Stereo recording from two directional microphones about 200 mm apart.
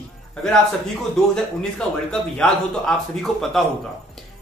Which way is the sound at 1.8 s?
5° left (ahead or behind).